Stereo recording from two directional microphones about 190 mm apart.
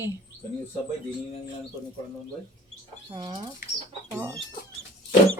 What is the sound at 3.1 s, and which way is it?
Speech, 25° right (ahead or behind).